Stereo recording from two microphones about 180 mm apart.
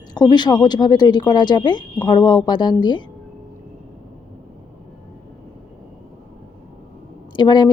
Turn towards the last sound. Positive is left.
turn(degrees=25)  # may be behind; listen again after turning